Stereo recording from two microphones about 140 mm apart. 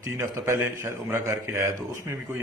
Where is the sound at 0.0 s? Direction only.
20° right (ahead or behind).